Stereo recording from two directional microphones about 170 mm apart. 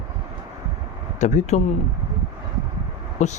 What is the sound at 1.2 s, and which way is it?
Speech, 45° left (ahead or behind).